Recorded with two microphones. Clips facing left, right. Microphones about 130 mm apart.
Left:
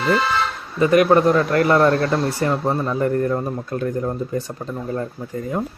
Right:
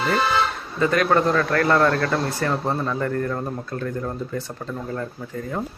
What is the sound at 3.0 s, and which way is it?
Speech, 15° left (ahead or behind).